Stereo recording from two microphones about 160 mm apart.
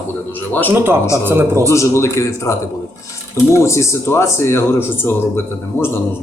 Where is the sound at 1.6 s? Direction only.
20° left (ahead or behind).